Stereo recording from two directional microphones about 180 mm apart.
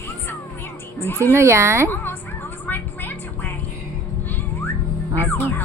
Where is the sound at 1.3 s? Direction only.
15° right (ahead or behind).